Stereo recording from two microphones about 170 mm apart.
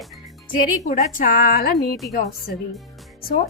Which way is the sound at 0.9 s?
50° left (ahead or behind).